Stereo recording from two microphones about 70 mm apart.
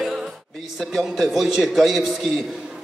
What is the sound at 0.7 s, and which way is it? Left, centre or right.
A man's voice, centre.